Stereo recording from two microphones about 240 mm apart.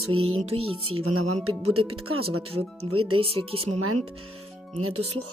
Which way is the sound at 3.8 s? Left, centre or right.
Right.